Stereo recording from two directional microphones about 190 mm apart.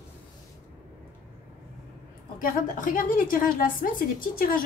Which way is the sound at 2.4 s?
45° left (ahead or behind).